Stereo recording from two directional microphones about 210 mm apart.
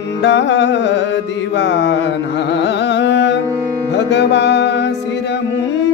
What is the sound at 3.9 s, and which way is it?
Music, 55° left (ahead or behind).